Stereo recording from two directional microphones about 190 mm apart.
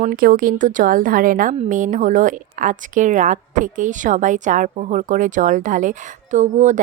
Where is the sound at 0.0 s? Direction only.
50° right (ahead or behind).